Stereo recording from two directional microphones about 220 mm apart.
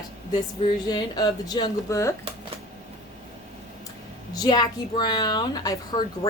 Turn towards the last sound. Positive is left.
turn(degrees=20)  # may be behind; listen again after turning